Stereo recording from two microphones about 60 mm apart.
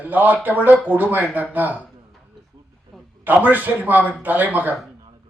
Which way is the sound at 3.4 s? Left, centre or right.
Right.